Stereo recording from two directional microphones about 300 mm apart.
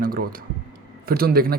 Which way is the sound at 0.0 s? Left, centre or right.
Right.